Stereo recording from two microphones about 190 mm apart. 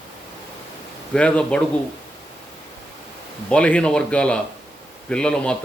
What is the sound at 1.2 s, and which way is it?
Speech, 5° left (ahead or behind).